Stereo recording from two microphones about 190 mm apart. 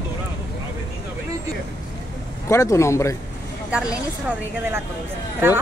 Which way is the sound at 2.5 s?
15° left (ahead or behind).